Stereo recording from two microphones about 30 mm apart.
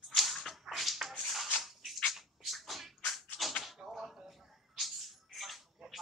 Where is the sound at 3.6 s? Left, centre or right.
Centre.